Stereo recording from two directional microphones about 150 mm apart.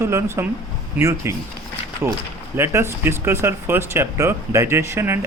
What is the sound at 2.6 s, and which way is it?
Speech, 15° right (ahead or behind).